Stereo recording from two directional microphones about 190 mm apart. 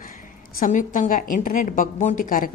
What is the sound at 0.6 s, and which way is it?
A woman's voice, 45° left (ahead or behind).